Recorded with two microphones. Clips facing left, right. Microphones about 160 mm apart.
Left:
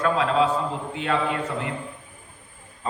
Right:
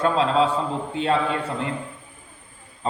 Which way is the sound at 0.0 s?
30° right (ahead or behind).